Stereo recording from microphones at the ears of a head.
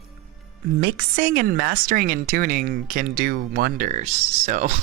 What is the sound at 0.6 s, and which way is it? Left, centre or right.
A woman's voice, right.